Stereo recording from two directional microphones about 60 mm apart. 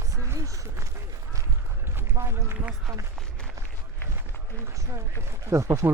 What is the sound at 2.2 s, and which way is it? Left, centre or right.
Speech, right.